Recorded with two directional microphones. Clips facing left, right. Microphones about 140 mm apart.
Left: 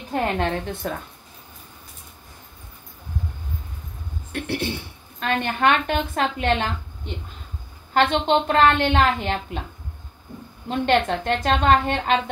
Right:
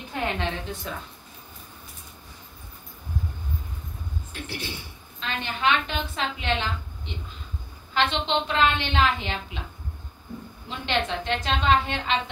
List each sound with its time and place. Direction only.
0.1 s a woman's voice: 50° left (ahead or behind)
4.3 s a woman's voice: 60° left (ahead or behind)
7.9 s a woman's voice: 50° left (ahead or behind)
10.7 s a woman's voice: 50° left (ahead or behind)